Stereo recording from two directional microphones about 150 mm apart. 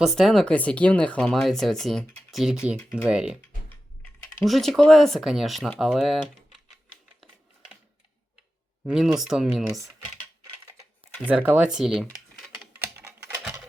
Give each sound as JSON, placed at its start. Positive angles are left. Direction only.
{"t": 0.0, "sound": "speech", "side_deg": 0}
{"t": 4.4, "sound": "speech", "side_deg": 0}
{"t": 8.8, "sound": "speech", "side_deg": -5}
{"t": 11.3, "sound": "speech", "side_deg": -10}
{"t": 12.8, "sound": "typing", "side_deg": -15}